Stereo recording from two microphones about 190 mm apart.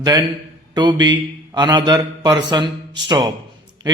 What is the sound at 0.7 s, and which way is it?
A man's voice, 25° right (ahead or behind).